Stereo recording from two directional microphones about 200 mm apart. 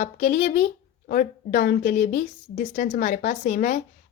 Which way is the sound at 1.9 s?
35° left (ahead or behind).